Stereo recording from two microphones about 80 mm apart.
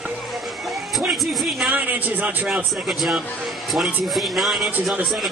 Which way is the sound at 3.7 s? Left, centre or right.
Centre.